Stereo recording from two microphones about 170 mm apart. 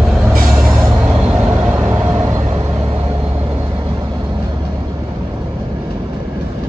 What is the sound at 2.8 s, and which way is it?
Vehicle, 35° right (ahead or behind).